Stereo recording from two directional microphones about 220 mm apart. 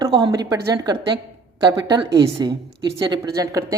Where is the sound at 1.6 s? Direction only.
20° right (ahead or behind).